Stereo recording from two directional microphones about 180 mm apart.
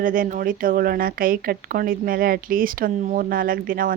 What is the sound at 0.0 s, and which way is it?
Speech, 50° right (ahead or behind).